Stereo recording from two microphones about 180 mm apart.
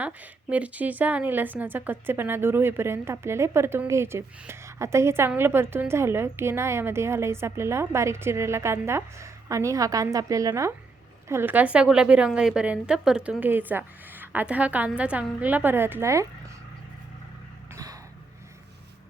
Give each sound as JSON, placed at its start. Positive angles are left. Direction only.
{"t": 0.0, "sound": "a woman's voice", "side_deg": -10}